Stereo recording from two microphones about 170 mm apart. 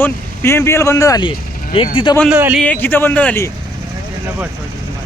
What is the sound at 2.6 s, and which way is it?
Speech, 10° left (ahead or behind).